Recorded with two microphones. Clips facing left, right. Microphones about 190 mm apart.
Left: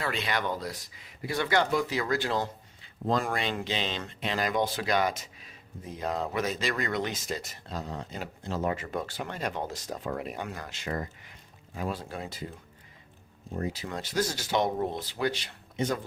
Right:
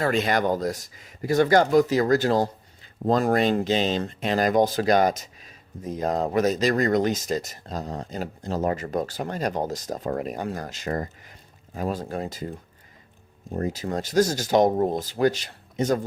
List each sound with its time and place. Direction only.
0.0 s speech: 45° right (ahead or behind)